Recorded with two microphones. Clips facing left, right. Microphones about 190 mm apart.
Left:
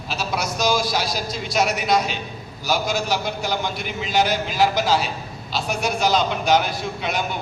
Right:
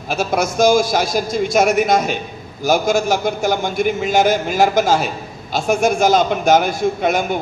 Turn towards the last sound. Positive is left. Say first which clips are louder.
# right 8 dB
turn(degrees=-50)  # may be behind; listen again after turning